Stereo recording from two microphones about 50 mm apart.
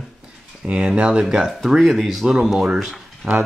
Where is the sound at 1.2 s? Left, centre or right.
Centre.